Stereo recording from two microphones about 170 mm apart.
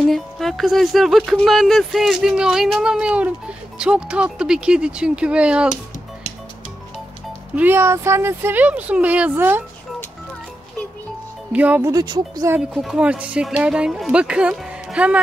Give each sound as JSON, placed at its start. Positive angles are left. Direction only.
{"t": 0.1, "sound": "speech", "side_deg": 0}
{"t": 7.5, "sound": "speech", "side_deg": -10}
{"t": 11.5, "sound": "speech", "side_deg": -10}
{"t": 11.9, "sound": "speech", "side_deg": -25}
{"t": 12.5, "sound": "speech", "side_deg": -5}